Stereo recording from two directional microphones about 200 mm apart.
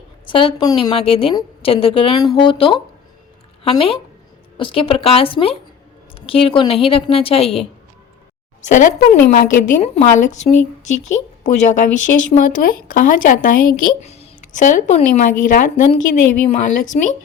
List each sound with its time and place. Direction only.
0.3 s a woman's voice: 25° left (ahead or behind)
6.1 s a sound: 30° left (ahead or behind)
6.6 s a woman's voice: 30° left (ahead or behind)
8.7 s speech: 40° left (ahead or behind)
9.8 s speech: 35° left (ahead or behind)